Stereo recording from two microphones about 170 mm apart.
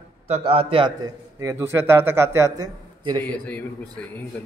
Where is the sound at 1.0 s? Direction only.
20° right (ahead or behind).